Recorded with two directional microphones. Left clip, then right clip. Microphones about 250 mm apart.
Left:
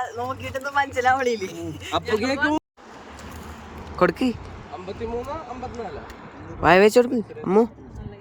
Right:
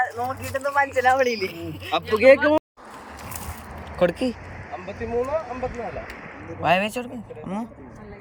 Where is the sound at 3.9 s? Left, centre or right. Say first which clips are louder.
Left 1 dB; centre.